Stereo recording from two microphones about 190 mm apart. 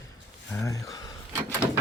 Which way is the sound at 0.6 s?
15° left (ahead or behind).